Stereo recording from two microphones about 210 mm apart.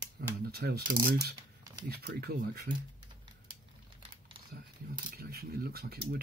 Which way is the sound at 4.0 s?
25° right (ahead or behind).